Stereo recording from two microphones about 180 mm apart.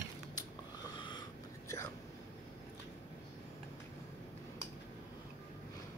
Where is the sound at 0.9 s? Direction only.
25° left (ahead or behind).